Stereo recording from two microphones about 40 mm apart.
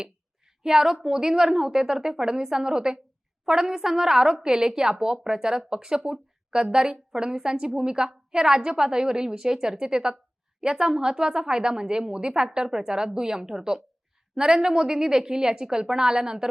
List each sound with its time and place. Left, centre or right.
0.6 s a woman's voice: centre